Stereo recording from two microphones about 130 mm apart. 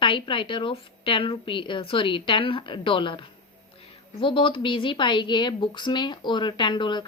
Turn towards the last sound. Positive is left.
turn(degrees=35)  # may be behind; listen again after turning